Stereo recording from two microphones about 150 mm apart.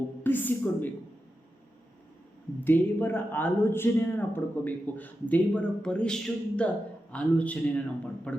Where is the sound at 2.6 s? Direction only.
15° left (ahead or behind).